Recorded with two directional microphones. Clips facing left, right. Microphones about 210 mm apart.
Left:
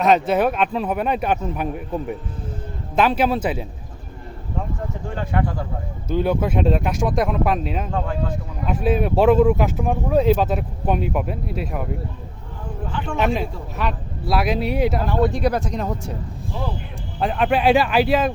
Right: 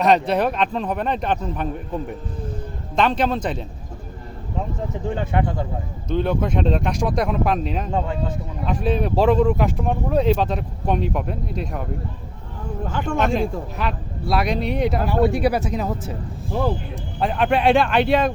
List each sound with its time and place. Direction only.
0.0 s a man's voice: centre (ahead or behind)
2.9 s a man's voice: 5° left (ahead or behind)
5.0 s speech: 20° right (ahead or behind)
6.1 s speech: 5° left (ahead or behind)
12.9 s speech: 45° right (ahead or behind)
13.2 s speech: 5° left (ahead or behind)
15.0 s speech: 10° right (ahead or behind)
17.2 s speech: centre (ahead or behind)